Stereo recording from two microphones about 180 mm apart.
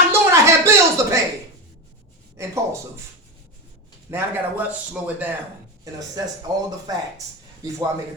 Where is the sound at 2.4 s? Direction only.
15° right (ahead or behind).